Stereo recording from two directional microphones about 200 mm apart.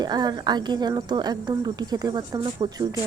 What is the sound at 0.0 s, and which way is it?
A woman's voice, 20° right (ahead or behind).